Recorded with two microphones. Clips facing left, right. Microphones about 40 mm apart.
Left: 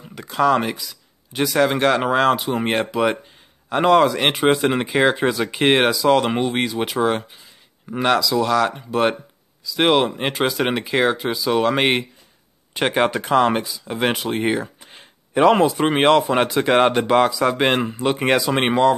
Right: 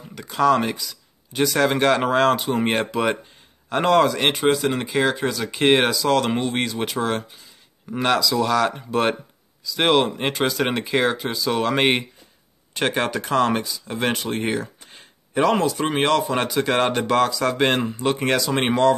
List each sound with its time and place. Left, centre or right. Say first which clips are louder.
0.1 s speech: left 1 dB; centre
4.5 s speech: left 3 dB; left
5.5 s speech: right 1 dB; centre
12.7 s speech: left 3 dB; centre